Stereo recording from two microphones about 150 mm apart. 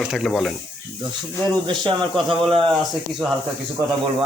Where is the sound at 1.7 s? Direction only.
35° right (ahead or behind).